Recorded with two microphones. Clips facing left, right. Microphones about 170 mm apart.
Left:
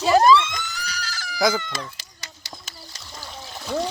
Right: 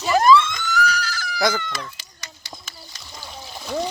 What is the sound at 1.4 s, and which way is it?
Speech, 5° left (ahead or behind).